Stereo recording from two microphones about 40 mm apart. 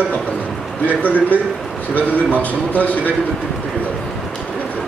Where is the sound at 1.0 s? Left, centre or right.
Left.